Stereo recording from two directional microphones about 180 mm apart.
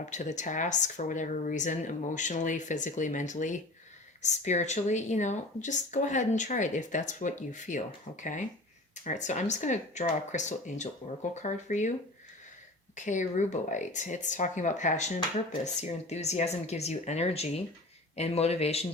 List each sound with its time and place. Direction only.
0.1 s speech: 40° left (ahead or behind)
13.1 s speech: 40° left (ahead or behind)